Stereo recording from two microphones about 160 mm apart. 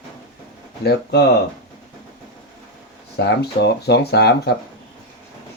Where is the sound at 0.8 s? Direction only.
90° left.